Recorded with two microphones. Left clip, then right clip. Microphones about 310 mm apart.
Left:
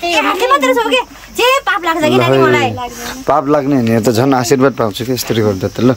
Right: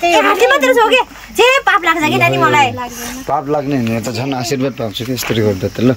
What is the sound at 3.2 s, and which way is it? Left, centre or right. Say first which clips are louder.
Speech: left 5 dB; left.